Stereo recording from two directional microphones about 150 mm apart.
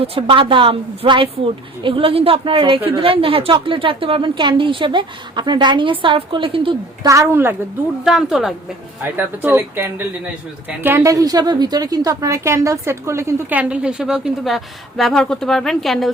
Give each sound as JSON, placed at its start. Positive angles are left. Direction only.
{"t": 0.0, "sound": "a woman's voice", "side_deg": -40}
{"t": 7.1, "sound": "a woman's voice", "side_deg": -15}
{"t": 8.0, "sound": "a woman's voice", "side_deg": 0}
{"t": 9.0, "sound": "a woman's voice", "side_deg": -15}